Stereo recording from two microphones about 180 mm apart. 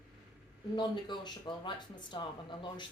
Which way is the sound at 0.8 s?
25° left (ahead or behind).